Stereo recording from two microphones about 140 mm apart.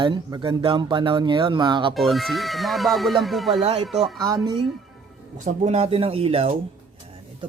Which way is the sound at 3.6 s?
50° right (ahead or behind).